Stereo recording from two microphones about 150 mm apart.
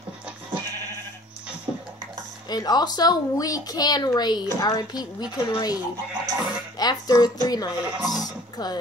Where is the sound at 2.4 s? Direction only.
25° left (ahead or behind).